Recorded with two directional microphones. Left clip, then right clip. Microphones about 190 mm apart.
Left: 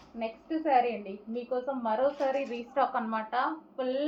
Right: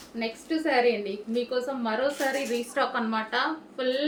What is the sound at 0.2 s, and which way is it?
A woman's voice, 25° right (ahead or behind).